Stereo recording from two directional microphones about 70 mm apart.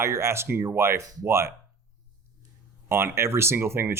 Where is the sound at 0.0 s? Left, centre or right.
Right.